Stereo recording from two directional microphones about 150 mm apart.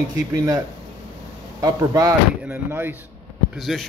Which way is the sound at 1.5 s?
25° right (ahead or behind).